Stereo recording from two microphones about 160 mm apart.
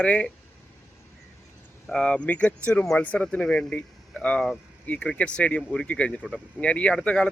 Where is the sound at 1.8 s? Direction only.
5° left (ahead or behind).